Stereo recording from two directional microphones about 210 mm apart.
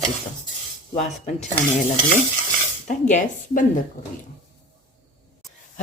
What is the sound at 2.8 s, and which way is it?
Speech, 35° left (ahead or behind).